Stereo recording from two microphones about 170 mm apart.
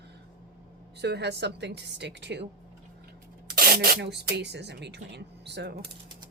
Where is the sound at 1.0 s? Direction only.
80° right.